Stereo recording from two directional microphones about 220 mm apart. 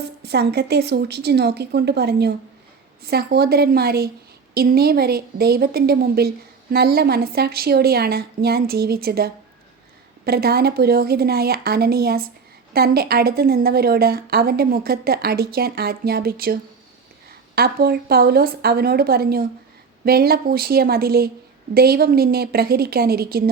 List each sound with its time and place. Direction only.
0.2 s a woman's voice: 50° right (ahead or behind)